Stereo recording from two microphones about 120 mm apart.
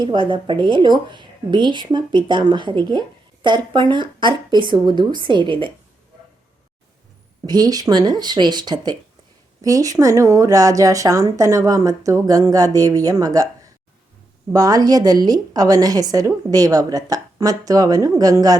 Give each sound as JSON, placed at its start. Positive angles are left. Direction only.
{"t": 0.0, "sound": "a woman's voice", "side_deg": -40}
{"t": 7.4, "sound": "a woman's voice", "side_deg": -30}